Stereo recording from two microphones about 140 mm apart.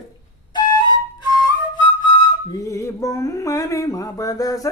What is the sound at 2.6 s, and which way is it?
Speech, 20° left (ahead or behind).